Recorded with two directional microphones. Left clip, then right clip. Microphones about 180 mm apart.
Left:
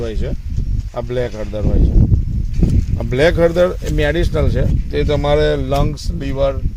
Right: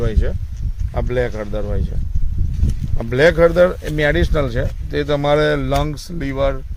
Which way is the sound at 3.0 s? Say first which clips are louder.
Right 1 dB; 20° left (ahead or behind).